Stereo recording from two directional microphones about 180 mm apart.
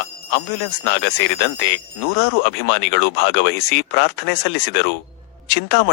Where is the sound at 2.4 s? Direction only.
70° left (ahead or behind).